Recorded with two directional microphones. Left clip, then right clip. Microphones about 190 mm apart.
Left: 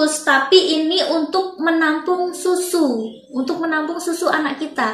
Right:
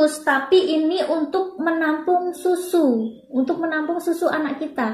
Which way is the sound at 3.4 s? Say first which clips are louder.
Left 3 dB; 25° right (ahead or behind).